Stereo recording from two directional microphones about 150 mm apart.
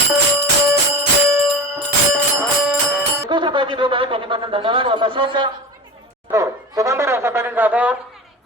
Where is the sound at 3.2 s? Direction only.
30° right (ahead or behind).